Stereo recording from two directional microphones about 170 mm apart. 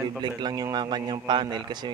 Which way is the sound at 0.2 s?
25° right (ahead or behind).